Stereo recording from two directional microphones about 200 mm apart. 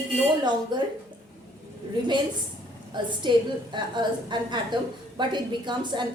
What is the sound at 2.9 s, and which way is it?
A woman's voice, 25° right (ahead or behind).